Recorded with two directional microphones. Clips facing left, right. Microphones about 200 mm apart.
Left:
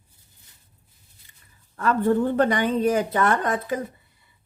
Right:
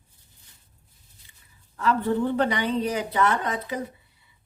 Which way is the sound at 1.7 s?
50° left (ahead or behind).